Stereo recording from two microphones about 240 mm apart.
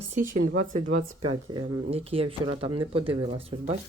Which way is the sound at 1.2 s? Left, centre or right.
Right.